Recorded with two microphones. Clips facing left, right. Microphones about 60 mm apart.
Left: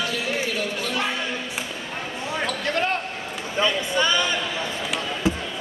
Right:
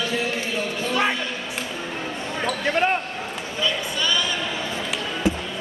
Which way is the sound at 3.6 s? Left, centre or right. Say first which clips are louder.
Left 4 dB; left.